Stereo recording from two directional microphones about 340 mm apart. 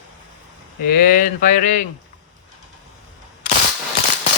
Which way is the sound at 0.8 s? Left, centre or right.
Left.